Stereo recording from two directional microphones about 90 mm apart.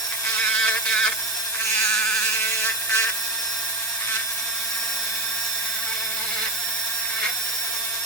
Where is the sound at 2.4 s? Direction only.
25° left (ahead or behind).